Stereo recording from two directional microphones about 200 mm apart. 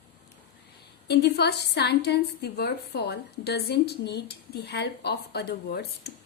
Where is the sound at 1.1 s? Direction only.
55° left (ahead or behind).